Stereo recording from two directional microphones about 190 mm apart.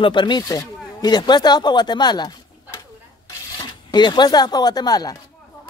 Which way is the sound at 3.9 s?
25° left (ahead or behind).